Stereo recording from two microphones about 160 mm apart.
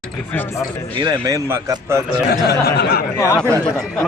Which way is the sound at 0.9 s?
25° right (ahead or behind).